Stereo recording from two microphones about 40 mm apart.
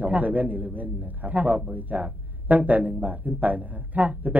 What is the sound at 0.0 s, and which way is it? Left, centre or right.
A man's voice, right.